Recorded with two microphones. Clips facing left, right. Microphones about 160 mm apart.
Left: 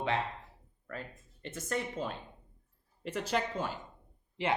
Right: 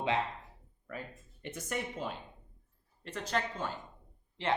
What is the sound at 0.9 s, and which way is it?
Speech, 10° right (ahead or behind).